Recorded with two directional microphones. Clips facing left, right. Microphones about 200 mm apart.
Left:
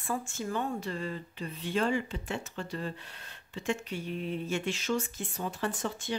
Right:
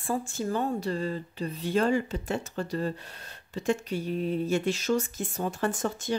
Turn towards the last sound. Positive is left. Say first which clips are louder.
# right 5 dB
turn(degrees=-45)  # may be behind; listen again after turning